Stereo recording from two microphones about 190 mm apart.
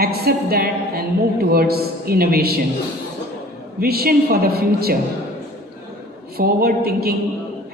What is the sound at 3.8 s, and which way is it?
A woman's voice, 55° right (ahead or behind).